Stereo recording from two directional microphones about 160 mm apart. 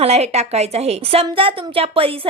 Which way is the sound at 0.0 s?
40° right (ahead or behind).